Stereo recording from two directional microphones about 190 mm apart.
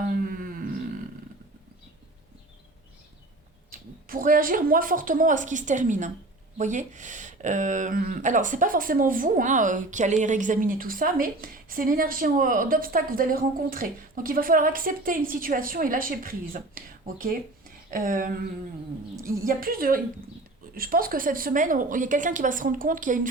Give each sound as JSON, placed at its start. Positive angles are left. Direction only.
{"t": 0.0, "sound": "a sound", "side_deg": -50}
{"t": 3.7, "sound": "speech", "side_deg": -45}
{"t": 19.5, "sound": "speech", "side_deg": -50}